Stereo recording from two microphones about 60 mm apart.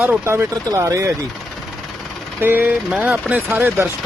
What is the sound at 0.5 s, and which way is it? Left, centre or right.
Speech, right.